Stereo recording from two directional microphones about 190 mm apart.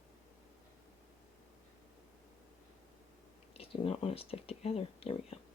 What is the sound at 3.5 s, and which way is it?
Speech, 30° left (ahead or behind).